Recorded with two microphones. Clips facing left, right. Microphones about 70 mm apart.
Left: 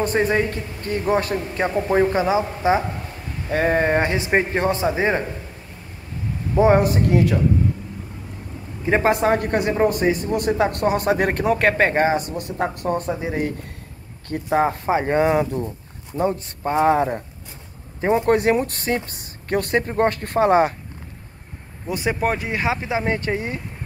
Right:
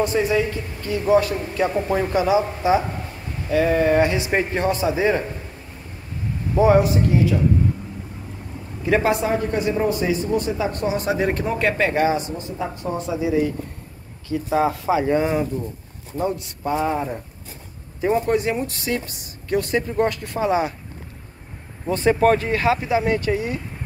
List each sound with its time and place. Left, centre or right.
0.0 s a man's voice: left
6.6 s a man's voice: left
8.8 s speech: left
9.1 s a man's voice: left
12.4 s a man's voice: left
16.2 s a man's voice: left
16.9 s speech: left
18.0 s a man's voice: left
21.8 s speech: centre; by 23.6 s left